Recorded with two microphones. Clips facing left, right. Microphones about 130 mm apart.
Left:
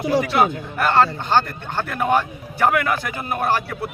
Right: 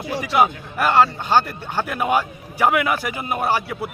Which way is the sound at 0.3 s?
10° right (ahead or behind).